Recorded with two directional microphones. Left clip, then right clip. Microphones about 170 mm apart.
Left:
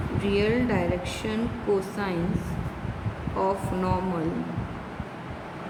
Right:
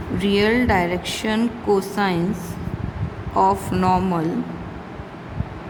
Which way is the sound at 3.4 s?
70° right (ahead or behind).